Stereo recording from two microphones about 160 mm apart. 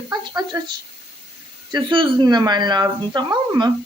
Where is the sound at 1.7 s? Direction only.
30° right (ahead or behind).